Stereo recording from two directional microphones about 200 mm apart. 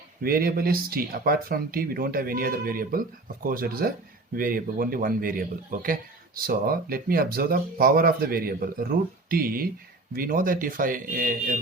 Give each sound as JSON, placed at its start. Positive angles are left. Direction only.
{"t": 0.2, "sound": "a man's voice", "side_deg": -45}